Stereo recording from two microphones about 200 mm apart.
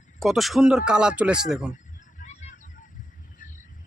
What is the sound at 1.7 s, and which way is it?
Honk, 35° left (ahead or behind).